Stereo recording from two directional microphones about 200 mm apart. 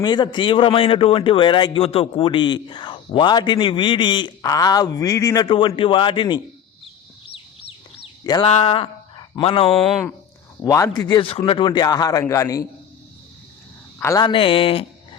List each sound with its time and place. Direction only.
0.0 s a man's voice: 20° left (ahead or behind)
8.2 s a sound: 20° left (ahead or behind)
8.4 s a sound: 30° left (ahead or behind)
9.4 s a man's voice: 25° left (ahead or behind)
10.6 s a man's voice: 15° left (ahead or behind)
14.0 s a man's voice: 15° left (ahead or behind)